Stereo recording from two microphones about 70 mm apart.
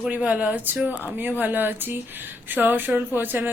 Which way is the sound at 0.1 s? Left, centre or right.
Centre.